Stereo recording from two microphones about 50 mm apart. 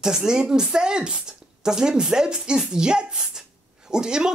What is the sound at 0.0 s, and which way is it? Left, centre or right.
Speech, centre.